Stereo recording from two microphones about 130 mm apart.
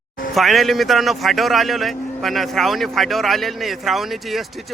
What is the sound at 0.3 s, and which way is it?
A man's voice, centre (ahead or behind).